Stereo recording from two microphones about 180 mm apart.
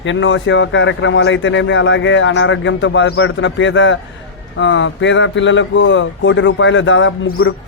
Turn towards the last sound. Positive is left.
turn(degrees=90)